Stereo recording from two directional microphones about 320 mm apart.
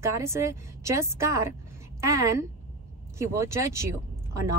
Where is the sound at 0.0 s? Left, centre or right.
Centre.